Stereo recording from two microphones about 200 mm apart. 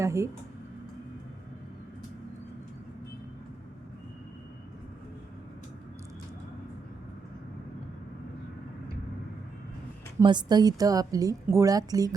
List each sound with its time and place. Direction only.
0.0 s speech: 15° right (ahead or behind)
10.2 s a woman's voice: 20° right (ahead or behind)